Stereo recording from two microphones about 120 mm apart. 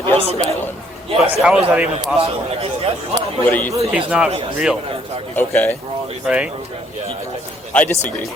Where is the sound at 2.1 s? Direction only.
55° right (ahead or behind).